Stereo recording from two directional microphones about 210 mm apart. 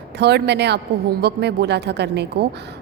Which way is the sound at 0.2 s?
55° right (ahead or behind).